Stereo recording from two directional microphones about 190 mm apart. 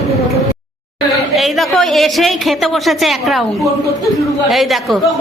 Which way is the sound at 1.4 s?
Centre (ahead or behind).